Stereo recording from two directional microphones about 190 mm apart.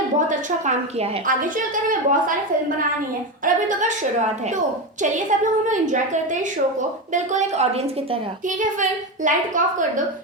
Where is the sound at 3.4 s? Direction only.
40° right (ahead or behind).